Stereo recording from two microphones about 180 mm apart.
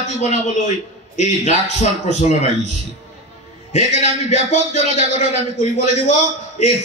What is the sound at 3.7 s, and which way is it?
A man's voice, 40° left (ahead or behind).